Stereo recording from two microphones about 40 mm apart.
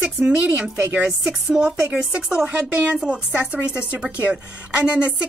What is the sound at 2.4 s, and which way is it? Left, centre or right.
Speech, right.